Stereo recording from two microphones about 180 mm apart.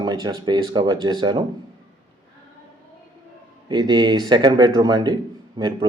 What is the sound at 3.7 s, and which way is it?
Speech, 25° right (ahead or behind).